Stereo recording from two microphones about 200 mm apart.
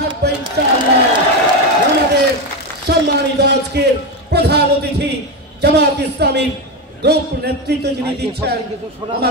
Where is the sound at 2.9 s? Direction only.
55° right (ahead or behind).